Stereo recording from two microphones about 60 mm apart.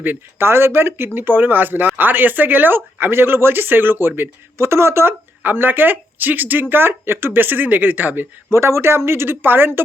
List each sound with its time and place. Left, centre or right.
0.0 s speech: right
5.4 s speech: right
8.4 s speech: right